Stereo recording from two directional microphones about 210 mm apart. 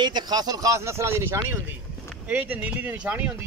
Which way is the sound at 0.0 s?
20° right (ahead or behind).